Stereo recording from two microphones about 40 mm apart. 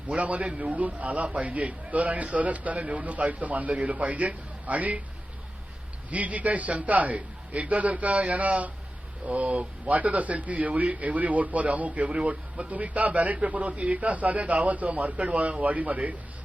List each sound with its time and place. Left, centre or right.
0.1 s speech: right
6.1 s speech: right